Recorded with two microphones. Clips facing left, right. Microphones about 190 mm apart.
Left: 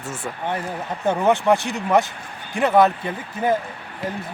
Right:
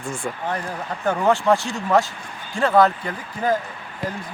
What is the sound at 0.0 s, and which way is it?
Speech, 5° left (ahead or behind).